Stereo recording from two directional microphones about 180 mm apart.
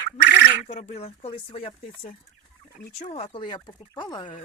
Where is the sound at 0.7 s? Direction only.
40° left (ahead or behind).